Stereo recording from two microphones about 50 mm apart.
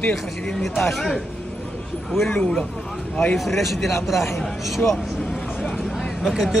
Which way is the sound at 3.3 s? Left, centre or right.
Centre.